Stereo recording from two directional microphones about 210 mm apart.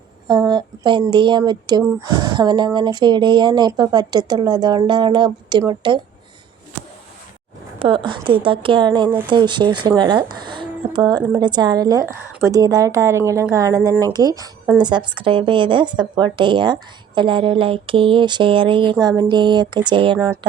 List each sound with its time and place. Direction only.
0.3 s speech: 20° right (ahead or behind)
7.8 s speech: 25° right (ahead or behind)